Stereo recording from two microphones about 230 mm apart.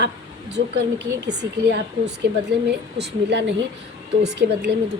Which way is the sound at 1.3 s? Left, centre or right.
Right.